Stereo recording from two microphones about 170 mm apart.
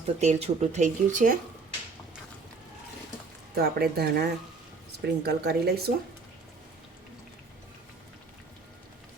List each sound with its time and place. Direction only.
0.2 s speech: 40° right (ahead or behind)
3.5 s speech: 65° right (ahead or behind)